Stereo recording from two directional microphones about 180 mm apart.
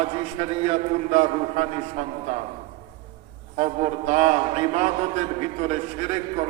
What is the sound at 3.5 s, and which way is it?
A man's voice, 40° right (ahead or behind).